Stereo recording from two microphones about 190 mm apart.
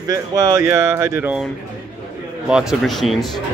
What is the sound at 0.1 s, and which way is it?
Speech, 20° right (ahead or behind).